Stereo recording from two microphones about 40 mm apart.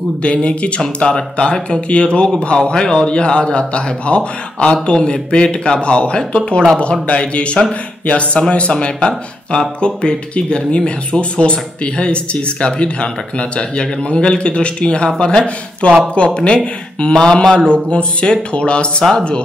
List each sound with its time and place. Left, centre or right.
0.2 s speech: left
15.8 s speech: left